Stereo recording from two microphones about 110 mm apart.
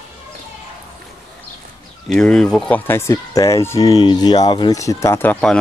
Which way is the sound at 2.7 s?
20° left (ahead or behind).